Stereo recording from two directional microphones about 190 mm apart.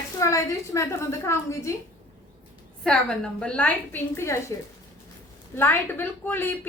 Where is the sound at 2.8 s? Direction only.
5° left (ahead or behind).